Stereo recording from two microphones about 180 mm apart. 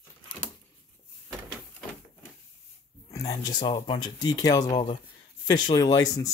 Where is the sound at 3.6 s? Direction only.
30° left (ahead or behind).